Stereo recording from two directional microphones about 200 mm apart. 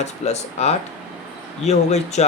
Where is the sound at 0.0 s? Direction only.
35° left (ahead or behind).